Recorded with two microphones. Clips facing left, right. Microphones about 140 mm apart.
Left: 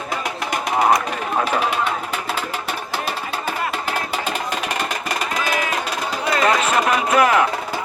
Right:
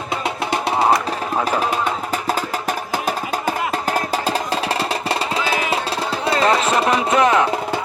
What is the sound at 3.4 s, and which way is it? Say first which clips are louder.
Music: right 3 dB; 40° right (ahead or behind).